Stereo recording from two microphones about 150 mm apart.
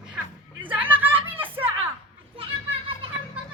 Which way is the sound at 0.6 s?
35° right (ahead or behind).